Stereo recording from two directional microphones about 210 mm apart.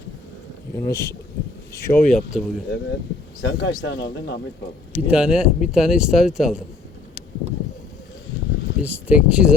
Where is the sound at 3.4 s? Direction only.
55° left (ahead or behind).